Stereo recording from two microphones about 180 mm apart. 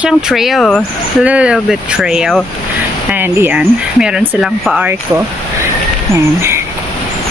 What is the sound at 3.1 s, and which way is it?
Speech, 10° right (ahead or behind).